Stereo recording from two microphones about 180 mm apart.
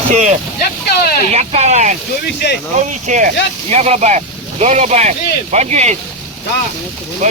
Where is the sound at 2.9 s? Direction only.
40° right (ahead or behind).